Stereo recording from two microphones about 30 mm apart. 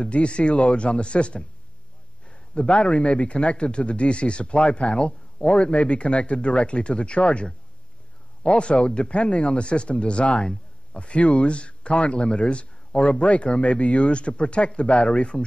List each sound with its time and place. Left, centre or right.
0.0 s a man's voice: left
2.2 s a sound: left
2.8 s a man's voice: left
8.5 s a man's voice: left